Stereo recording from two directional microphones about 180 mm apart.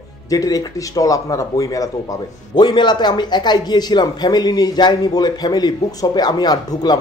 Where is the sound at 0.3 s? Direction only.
20° left (ahead or behind).